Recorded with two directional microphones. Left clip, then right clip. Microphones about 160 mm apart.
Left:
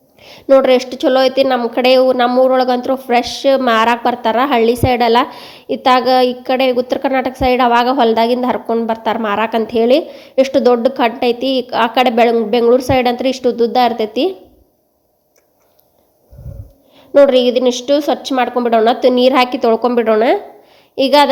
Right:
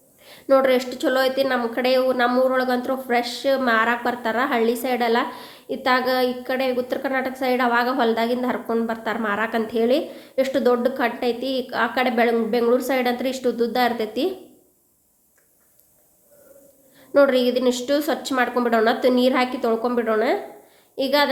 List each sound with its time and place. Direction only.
0.2 s a woman's voice: 40° left (ahead or behind)
17.2 s a woman's voice: 35° left (ahead or behind)